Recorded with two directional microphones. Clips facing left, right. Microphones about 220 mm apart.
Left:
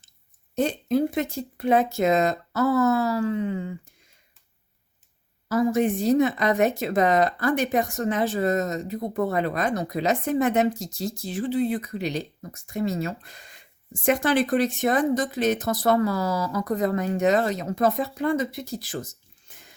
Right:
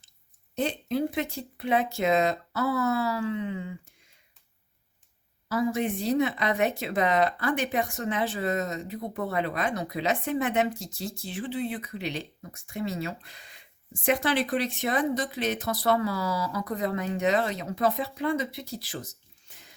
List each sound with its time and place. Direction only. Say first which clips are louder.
0.5 s a woman's voice: left 5 dB; 45° left (ahead or behind)
5.5 s a woman's voice: left 5 dB; 45° left (ahead or behind)